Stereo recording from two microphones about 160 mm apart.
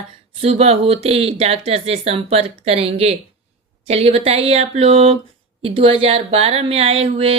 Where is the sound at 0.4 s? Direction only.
40° right (ahead or behind).